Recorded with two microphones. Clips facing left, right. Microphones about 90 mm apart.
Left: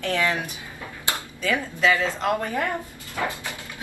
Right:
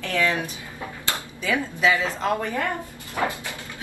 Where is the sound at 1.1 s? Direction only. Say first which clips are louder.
Even; 15° right (ahead or behind).